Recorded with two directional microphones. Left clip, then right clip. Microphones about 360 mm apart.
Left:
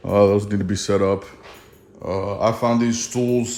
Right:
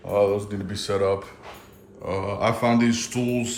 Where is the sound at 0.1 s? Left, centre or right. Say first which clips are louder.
Left 5 dB; left.